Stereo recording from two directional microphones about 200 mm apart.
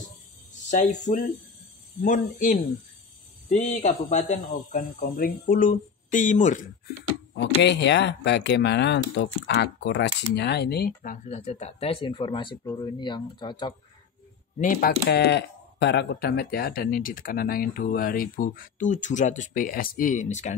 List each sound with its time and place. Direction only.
0.7 s a man's voice: 35° left (ahead or behind)
7.3 s speech: 60° left (ahead or behind)
11.0 s speech: 40° left (ahead or behind); by 13.7 s 20° left (ahead or behind)
14.6 s speech: 45° left (ahead or behind)